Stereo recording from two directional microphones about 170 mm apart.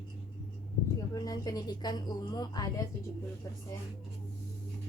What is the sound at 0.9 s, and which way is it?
A woman's voice, 20° left (ahead or behind).